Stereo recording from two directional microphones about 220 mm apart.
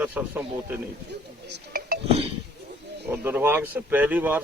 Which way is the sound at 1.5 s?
40° right (ahead or behind).